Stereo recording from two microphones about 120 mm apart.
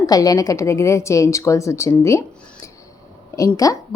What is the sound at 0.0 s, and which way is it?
A woman's voice, 30° left (ahead or behind).